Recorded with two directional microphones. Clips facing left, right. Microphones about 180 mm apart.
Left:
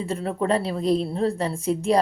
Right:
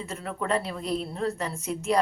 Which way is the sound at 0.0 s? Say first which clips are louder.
Left 7 dB; 30° left (ahead or behind).